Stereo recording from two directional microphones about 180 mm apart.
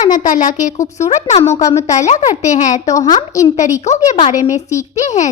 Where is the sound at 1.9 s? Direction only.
40° left (ahead or behind).